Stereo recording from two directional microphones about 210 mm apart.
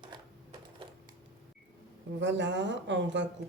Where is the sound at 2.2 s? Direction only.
60° right (ahead or behind).